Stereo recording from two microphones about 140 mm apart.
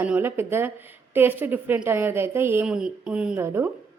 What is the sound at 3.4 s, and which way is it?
Speech, 15° right (ahead or behind).